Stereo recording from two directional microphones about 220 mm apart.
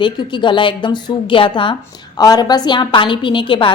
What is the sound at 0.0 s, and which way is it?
A woman's voice, 20° left (ahead or behind).